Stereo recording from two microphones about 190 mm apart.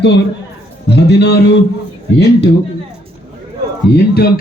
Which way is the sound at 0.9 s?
65° left (ahead or behind).